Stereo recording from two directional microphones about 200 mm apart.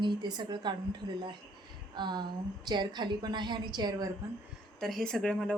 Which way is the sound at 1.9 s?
20° right (ahead or behind).